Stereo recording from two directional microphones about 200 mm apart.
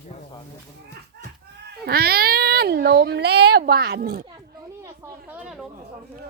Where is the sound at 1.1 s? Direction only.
55° right (ahead or behind).